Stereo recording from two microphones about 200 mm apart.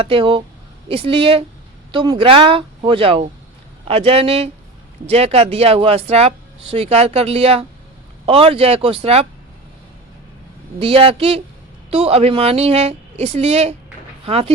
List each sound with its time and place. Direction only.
0.0 s speech: 25° right (ahead or behind)
10.8 s speech: 30° right (ahead or behind)